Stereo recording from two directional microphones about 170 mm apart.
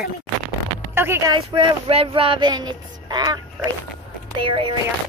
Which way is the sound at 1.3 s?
30° right (ahead or behind).